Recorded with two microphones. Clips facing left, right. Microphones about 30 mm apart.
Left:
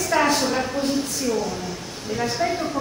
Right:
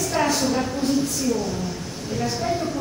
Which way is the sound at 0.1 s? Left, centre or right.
Left.